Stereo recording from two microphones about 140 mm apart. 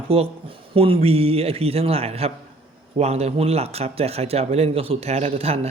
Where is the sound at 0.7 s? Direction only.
40° right (ahead or behind).